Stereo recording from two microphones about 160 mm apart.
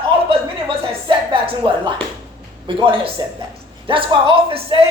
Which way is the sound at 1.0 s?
30° right (ahead or behind).